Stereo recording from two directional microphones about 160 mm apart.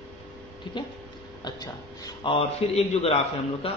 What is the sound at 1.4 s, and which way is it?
A man's voice, 25° left (ahead or behind).